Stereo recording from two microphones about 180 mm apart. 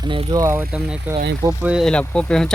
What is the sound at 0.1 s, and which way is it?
Speech, 20° right (ahead or behind).